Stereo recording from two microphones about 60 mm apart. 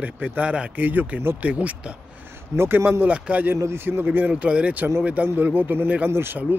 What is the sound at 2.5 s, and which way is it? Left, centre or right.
Speech, right.